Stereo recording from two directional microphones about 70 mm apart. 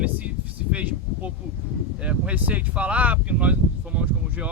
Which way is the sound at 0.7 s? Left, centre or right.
Right.